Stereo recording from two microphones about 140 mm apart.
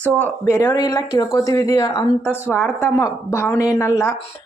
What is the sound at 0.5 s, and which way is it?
Speech, 20° left (ahead or behind).